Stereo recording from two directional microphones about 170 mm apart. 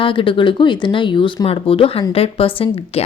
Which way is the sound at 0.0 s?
30° left (ahead or behind).